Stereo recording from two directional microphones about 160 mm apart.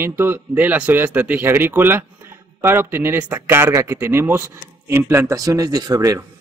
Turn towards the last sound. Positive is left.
turn(degrees=-20)  # may be behind; listen again after turning